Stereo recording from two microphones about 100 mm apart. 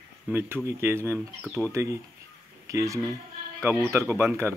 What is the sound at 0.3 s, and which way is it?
Speech, 20° right (ahead or behind).